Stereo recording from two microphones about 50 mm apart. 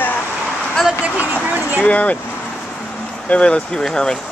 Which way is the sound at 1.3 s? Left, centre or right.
Right.